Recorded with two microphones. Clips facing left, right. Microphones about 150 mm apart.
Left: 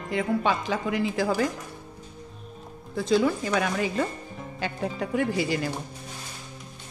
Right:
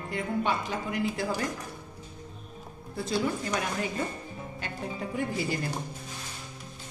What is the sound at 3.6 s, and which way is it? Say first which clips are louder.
A woman's voice: left 5 dB; 90° left.